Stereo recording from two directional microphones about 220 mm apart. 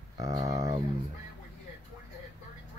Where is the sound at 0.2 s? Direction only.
15° right (ahead or behind).